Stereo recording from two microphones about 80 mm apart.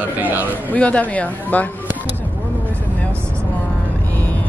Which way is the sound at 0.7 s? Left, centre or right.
Centre.